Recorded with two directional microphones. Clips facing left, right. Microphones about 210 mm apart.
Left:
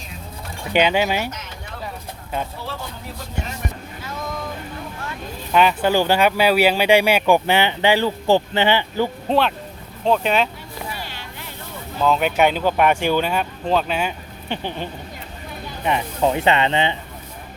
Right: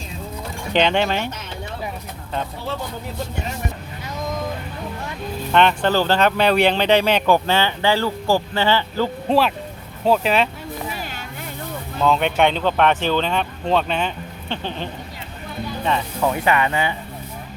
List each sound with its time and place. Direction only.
0.7 s speech: 5° left (ahead or behind)
5.5 s speech: 5° left (ahead or behind)
9.3 s speech: centre (ahead or behind)
11.9 s speech: centre (ahead or behind); by 16.9 s 25° left (ahead or behind)